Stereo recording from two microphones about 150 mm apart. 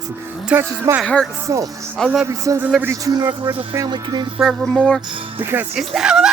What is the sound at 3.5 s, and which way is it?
Speech, 10° right (ahead or behind).